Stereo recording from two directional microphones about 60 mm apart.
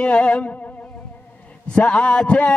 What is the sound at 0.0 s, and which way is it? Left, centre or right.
Music, centre.